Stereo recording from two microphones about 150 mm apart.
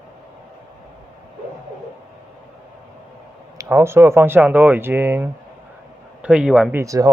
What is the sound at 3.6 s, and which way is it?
Speech, 15° right (ahead or behind).